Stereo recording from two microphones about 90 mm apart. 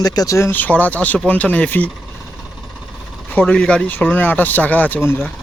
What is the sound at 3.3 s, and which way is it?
Speech, 15° left (ahead or behind).